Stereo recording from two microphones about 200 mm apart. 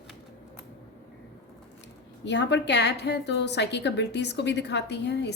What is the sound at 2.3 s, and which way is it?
A woman's voice, 60° left (ahead or behind).